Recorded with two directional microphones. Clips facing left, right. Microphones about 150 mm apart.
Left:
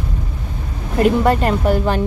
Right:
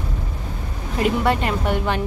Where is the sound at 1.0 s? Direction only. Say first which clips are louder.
Left 5 dB; 45° left (ahead or behind).